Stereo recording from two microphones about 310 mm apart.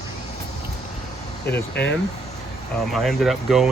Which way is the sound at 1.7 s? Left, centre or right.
Left.